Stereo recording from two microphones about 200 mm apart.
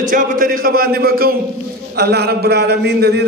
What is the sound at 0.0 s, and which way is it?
A man's voice, 45° right (ahead or behind).